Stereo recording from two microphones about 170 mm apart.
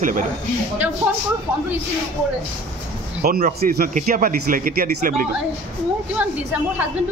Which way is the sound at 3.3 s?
60° right (ahead or behind).